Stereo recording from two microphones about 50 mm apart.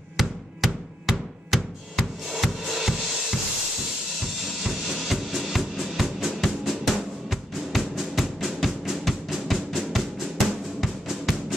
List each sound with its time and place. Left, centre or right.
0.2 s a sound: centre
4.6 s drum: centre
6.6 s music: centre
10.8 s drum: centre